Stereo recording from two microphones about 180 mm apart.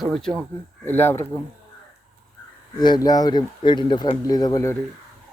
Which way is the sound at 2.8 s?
20° left (ahead or behind).